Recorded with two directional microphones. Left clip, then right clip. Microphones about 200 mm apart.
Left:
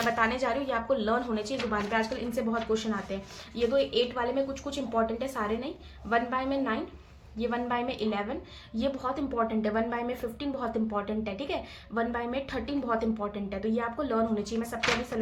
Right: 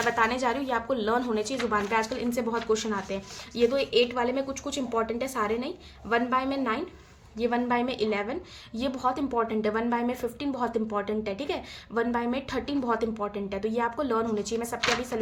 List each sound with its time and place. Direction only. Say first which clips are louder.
0.2 s a woman's voice: right 2 dB; 35° right (ahead or behind)